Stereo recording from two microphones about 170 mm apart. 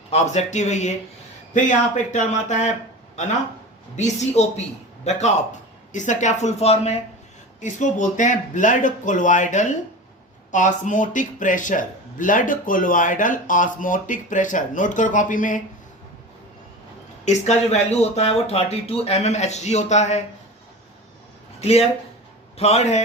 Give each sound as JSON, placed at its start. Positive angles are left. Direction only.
{"t": 0.1, "sound": "speech", "side_deg": 40}
{"t": 3.9, "sound": "speech", "side_deg": 45}
{"t": 17.2, "sound": "speech", "side_deg": 40}
{"t": 21.6, "sound": "speech", "side_deg": 35}